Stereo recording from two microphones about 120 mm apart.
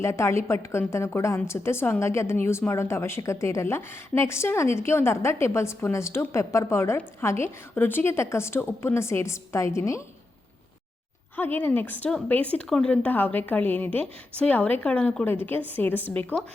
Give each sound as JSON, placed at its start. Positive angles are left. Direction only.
{"t": 0.0, "sound": "a woman's voice", "side_deg": 25}
{"t": 11.3, "sound": "a woman's voice", "side_deg": 15}